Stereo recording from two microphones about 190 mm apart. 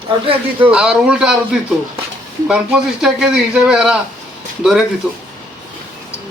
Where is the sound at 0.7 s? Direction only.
5° right (ahead or behind).